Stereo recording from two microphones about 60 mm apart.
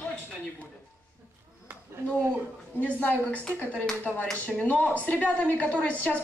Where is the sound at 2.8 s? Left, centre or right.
Left.